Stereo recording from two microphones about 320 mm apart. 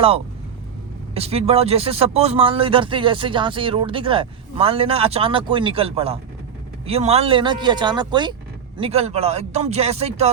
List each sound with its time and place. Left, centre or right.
1.1 s speech: centre